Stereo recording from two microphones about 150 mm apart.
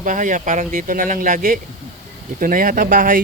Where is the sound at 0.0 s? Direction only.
60° right (ahead or behind).